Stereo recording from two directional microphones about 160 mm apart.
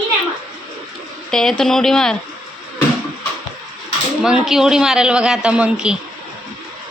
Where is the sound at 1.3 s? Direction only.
5° left (ahead or behind).